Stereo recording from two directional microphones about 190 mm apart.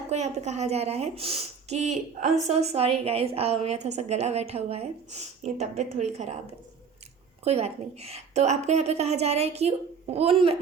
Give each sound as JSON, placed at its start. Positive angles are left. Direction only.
{"t": 0.1, "sound": "a woman's voice", "side_deg": -35}
{"t": 7.4, "sound": "a woman's voice", "side_deg": -35}